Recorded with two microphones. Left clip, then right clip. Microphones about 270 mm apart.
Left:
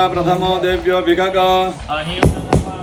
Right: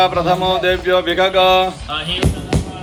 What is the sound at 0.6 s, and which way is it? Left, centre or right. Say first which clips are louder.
Mantra: even; centre.